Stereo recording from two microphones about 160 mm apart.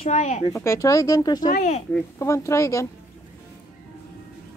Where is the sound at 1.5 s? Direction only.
50° left (ahead or behind).